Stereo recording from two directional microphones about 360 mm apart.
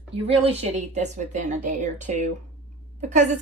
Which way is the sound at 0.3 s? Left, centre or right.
Centre.